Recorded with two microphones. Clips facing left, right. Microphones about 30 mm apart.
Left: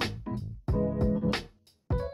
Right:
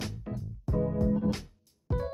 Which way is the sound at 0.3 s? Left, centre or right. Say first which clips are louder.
Left 1 dB; left.